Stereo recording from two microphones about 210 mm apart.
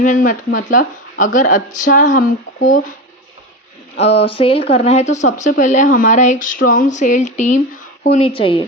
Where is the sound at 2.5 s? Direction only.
70° left (ahead or behind).